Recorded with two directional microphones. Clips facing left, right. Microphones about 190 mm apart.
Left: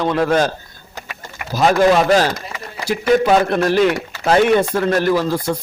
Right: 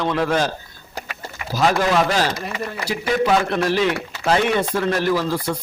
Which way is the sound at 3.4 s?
50° left (ahead or behind).